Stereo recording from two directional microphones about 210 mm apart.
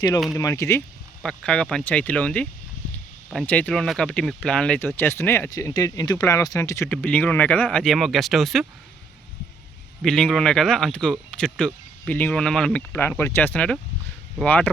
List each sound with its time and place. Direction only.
0.3 s speech: 15° left (ahead or behind)
1.2 s speech: 5° left (ahead or behind)
10.0 s speech: centre (ahead or behind)